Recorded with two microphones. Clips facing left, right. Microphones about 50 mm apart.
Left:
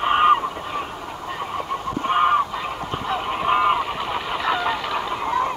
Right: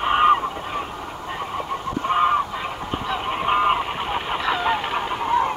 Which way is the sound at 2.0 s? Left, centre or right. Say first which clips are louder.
Left 1 dB; left.